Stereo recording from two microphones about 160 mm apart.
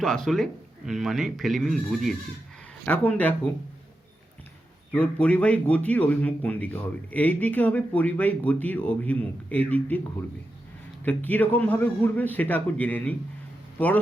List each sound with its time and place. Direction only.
0.0 s speech: 5° left (ahead or behind)
4.9 s a man's voice: 10° left (ahead or behind)